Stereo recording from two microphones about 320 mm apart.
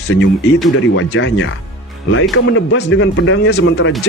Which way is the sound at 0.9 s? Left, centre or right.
Left.